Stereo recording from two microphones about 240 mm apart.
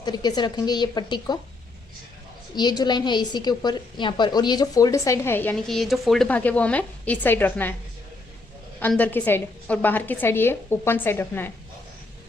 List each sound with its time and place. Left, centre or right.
0.0 s a woman's voice: centre
2.6 s a woman's voice: centre
8.8 s a woman's voice: centre